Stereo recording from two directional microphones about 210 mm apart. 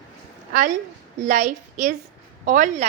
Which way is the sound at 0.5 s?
40° right (ahead or behind).